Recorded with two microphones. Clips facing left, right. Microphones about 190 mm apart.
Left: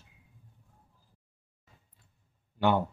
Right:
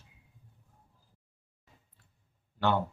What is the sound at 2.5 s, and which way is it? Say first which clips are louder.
Speech: left 2 dB; 15° left (ahead or behind).